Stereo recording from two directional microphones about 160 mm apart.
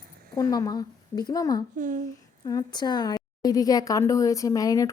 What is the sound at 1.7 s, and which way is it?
Speech, 50° right (ahead or behind).